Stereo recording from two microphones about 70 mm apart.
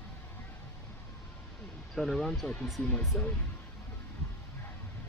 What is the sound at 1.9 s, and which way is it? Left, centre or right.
Speech, centre.